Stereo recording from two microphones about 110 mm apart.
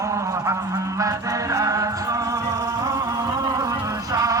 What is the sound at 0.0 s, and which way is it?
Music, 30° right (ahead or behind).